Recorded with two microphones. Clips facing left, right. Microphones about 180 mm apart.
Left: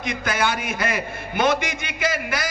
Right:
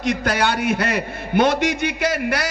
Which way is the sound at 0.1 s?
65° right (ahead or behind).